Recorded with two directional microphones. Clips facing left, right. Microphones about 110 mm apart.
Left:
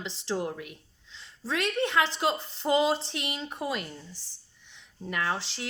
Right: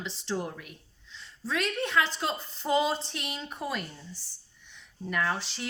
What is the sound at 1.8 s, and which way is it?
Speech, 25° left (ahead or behind).